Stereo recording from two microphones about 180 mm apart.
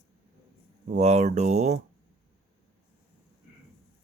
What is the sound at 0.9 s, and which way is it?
Speech, 40° right (ahead or behind).